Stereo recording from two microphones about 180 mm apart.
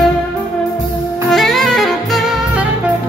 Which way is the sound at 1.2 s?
Centre (ahead or behind).